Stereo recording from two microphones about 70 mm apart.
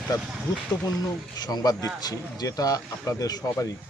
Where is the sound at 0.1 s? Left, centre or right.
Left.